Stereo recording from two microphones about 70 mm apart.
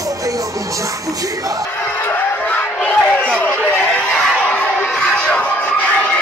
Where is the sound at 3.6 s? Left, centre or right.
Centre.